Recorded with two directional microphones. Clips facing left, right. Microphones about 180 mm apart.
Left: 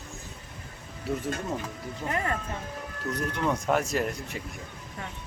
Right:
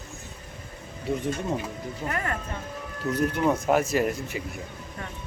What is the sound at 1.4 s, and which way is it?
Speech, 10° right (ahead or behind).